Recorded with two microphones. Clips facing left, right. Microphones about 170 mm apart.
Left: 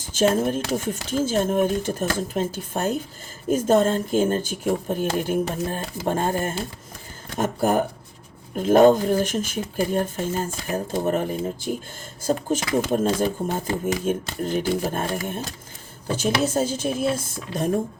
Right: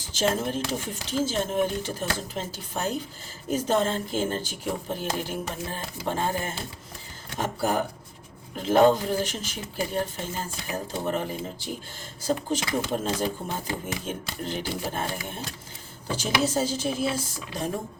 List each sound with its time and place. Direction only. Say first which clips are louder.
0.1 s speech: left 6 dB; 50° left (ahead or behind)